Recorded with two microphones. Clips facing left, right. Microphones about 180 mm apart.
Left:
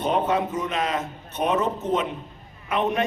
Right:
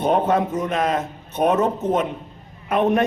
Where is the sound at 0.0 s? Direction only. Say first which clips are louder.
Right 4 dB; 50° right (ahead or behind).